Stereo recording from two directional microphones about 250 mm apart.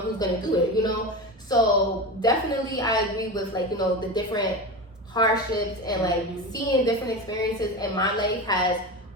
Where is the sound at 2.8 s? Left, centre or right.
Centre.